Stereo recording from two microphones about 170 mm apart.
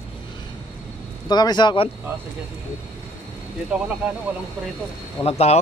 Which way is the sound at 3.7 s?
5° right (ahead or behind).